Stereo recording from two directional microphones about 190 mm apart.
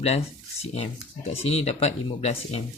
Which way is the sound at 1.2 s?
30° left (ahead or behind).